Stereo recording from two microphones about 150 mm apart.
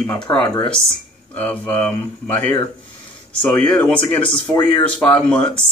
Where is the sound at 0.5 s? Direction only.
35° left (ahead or behind).